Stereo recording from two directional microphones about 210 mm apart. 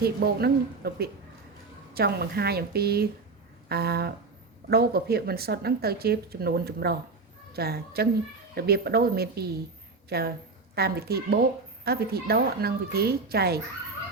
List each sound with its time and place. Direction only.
0.0 s a woman's voice: 50° right (ahead or behind)